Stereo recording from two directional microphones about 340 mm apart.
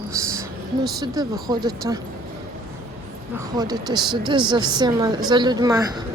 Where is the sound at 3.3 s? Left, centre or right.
Centre.